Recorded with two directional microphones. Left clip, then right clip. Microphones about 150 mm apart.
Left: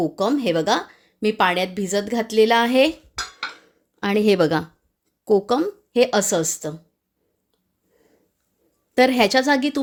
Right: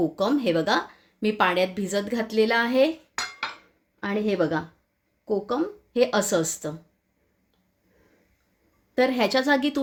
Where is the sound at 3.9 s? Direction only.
70° left (ahead or behind); by 6.8 s 40° left (ahead or behind).